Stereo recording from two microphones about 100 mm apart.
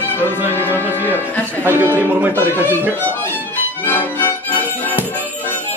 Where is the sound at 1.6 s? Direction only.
20° right (ahead or behind).